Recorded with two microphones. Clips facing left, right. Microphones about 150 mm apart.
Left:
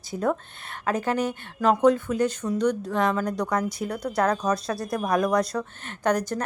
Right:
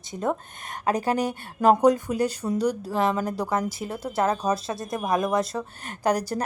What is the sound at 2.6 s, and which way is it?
A woman's voice, 5° right (ahead or behind).